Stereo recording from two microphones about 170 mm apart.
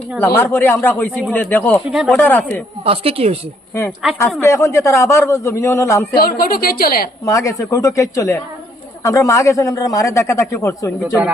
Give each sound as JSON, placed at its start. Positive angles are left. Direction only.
{"t": 0.3, "sound": "a man's voice", "side_deg": 10}
{"t": 1.9, "sound": "speech", "side_deg": 0}
{"t": 2.1, "sound": "a man's voice", "side_deg": 10}
{"t": 2.8, "sound": "speech", "side_deg": -35}
{"t": 4.2, "sound": "a man's voice", "side_deg": 15}
{"t": 6.1, "sound": "a woman's voice", "side_deg": 60}
{"t": 7.3, "sound": "a man's voice", "side_deg": 20}